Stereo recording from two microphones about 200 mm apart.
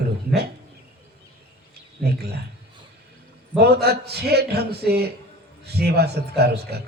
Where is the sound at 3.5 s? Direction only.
55° right (ahead or behind).